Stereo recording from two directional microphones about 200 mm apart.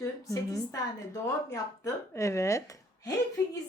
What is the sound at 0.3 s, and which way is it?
A woman's voice, 15° left (ahead or behind).